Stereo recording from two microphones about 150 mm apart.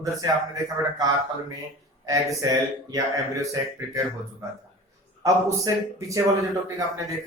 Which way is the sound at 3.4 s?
20° right (ahead or behind).